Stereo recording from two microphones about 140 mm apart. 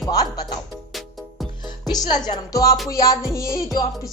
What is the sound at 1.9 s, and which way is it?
Speech, 30° left (ahead or behind).